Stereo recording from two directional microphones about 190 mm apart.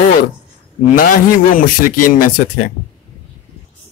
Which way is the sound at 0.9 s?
45° left (ahead or behind).